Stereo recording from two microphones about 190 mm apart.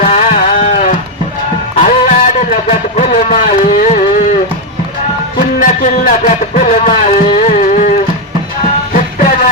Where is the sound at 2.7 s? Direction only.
40° left (ahead or behind).